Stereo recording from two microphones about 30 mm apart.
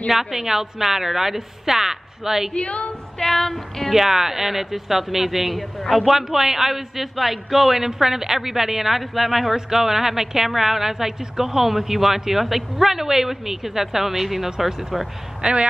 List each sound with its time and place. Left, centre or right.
0.1 s a man's voice: centre
2.5 s a woman's voice: left
3.2 s music: centre
3.9 s a man's voice: centre
6.1 s a man's voice: centre
15.4 s speech: right